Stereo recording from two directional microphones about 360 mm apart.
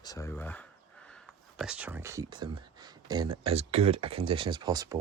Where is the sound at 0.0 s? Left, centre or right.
Centre.